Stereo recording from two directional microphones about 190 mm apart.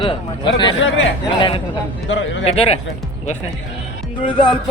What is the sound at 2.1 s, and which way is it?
Speech, 75° left (ahead or behind).